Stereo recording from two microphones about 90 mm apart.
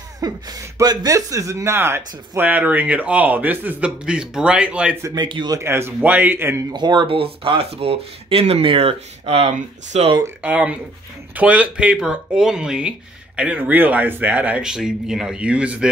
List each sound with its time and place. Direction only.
0.2 s speech: 40° right (ahead or behind); by 4.9 s 15° right (ahead or behind)
5.1 s speech: 55° right (ahead or behind)
5.6 s speech: 30° right (ahead or behind)
6.7 s speech: 55° right (ahead or behind); by 8.9 s 90° right
10.4 s speech: 15° right (ahead or behind)